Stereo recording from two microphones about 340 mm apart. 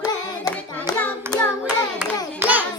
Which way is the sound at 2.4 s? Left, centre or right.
Centre.